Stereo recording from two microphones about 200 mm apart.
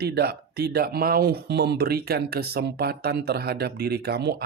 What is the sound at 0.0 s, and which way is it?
Speech, 50° right (ahead or behind).